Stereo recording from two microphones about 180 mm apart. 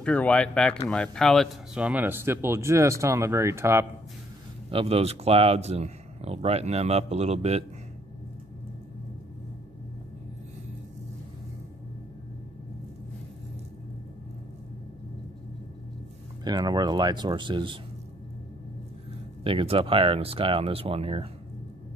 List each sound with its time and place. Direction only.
0.0 s speech: 5° left (ahead or behind); by 3.8 s 15° right (ahead or behind)
4.6 s speech: 30° right (ahead or behind)
16.4 s speech: 25° right (ahead or behind)
19.4 s speech: 30° right (ahead or behind)